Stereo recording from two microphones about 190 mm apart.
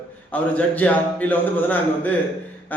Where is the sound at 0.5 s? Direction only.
10° left (ahead or behind).